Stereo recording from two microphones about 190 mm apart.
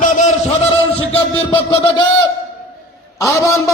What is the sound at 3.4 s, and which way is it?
Speech, 15° left (ahead or behind).